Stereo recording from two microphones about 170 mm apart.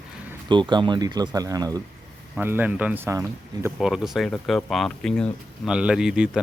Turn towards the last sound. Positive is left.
turn(degrees=-5)  # may be behind; listen again after turning